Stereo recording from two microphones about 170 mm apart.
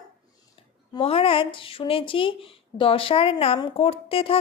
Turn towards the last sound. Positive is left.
turn(degrees=35)  # may be behind; listen again after turning